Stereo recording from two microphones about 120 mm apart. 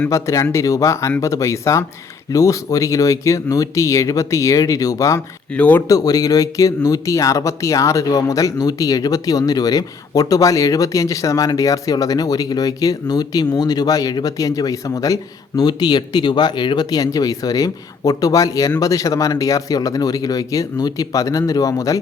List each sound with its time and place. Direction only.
0.1 s speech: 25° left (ahead or behind)
5.5 s speech: 10° left (ahead or behind)
5.9 s speech: 30° left (ahead or behind)